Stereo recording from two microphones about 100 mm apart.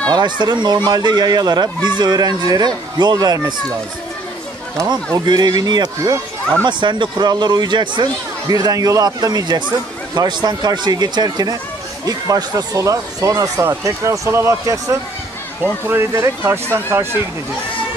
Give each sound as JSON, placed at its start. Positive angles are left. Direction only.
{"t": 0.1, "sound": "speech", "side_deg": -45}
{"t": 5.2, "sound": "speech", "side_deg": -45}
{"t": 8.5, "sound": "speech", "side_deg": -40}